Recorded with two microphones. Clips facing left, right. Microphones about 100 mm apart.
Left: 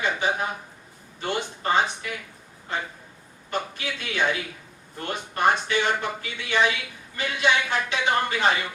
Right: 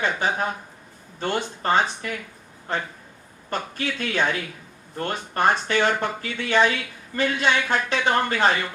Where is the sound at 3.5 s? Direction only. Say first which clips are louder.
Right 2 dB; 40° right (ahead or behind).